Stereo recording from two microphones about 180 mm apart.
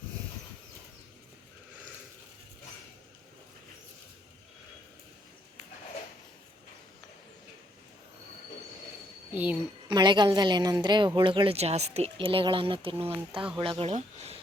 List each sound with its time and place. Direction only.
9.3 s a woman's voice: 10° right (ahead or behind)
9.9 s a woman's voice: 25° right (ahead or behind)